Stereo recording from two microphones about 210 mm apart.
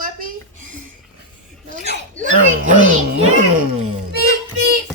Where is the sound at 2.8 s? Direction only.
35° right (ahead or behind).